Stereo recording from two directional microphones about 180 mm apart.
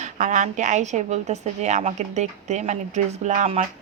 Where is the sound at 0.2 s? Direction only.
45° right (ahead or behind).